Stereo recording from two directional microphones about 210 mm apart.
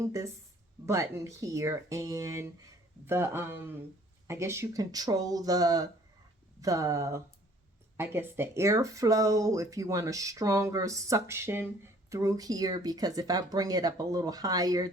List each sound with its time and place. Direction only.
0.0 s speech: 15° right (ahead or behind)